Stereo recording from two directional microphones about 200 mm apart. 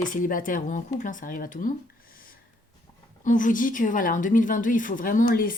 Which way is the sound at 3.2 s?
40° left (ahead or behind).